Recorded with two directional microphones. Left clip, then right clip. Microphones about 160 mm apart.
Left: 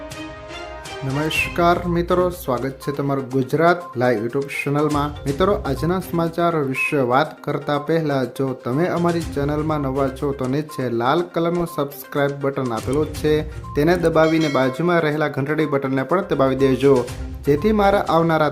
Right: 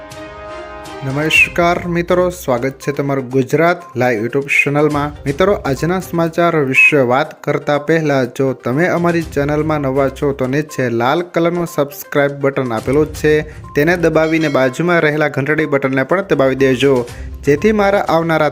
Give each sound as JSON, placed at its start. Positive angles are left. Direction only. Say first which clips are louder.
{"t": 1.2, "sound": "speech", "louder": "right 7 dB", "side_deg": -15}